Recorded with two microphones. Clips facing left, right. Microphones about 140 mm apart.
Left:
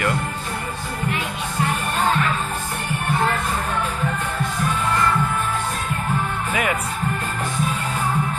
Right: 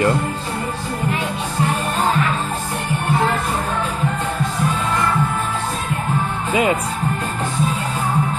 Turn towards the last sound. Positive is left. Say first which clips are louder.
# right 5 dB
turn(degrees=-25)  # may be behind; listen again after turning